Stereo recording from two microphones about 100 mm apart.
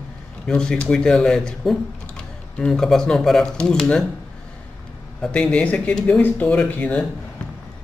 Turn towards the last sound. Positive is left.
turn(degrees=15)  # may be behind; listen again after turning